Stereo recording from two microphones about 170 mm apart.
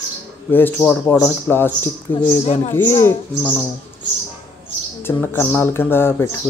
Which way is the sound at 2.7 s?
15° left (ahead or behind).